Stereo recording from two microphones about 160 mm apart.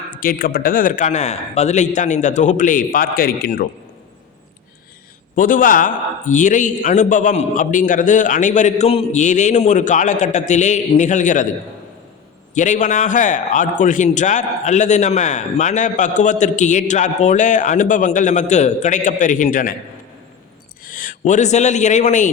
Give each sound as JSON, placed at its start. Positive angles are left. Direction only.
{"t": 0.1, "sound": "speech", "side_deg": 65}
{"t": 5.3, "sound": "a man's voice", "side_deg": 60}
{"t": 12.5, "sound": "a man's voice", "side_deg": 50}
{"t": 20.8, "sound": "a man's voice", "side_deg": 60}